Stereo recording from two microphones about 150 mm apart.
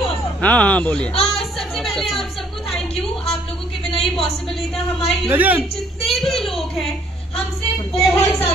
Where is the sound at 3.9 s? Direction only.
40° left (ahead or behind).